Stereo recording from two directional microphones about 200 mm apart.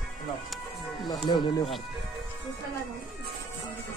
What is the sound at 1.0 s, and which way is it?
Speech, 20° left (ahead or behind).